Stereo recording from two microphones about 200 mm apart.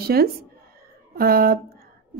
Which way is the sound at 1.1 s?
45° right (ahead or behind).